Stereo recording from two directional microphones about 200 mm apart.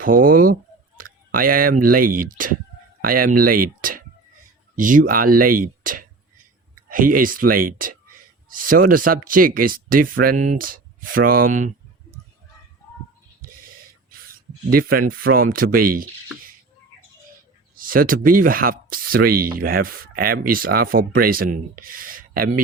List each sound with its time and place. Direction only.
0.0 s speech: 45° right (ahead or behind)
14.7 s speech: 45° right (ahead or behind)
17.7 s speech: 45° right (ahead or behind)